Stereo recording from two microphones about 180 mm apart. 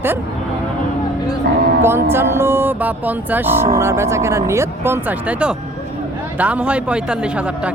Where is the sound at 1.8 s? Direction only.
15° right (ahead or behind).